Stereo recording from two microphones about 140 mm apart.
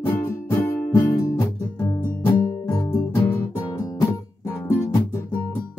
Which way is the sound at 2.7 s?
30° left (ahead or behind).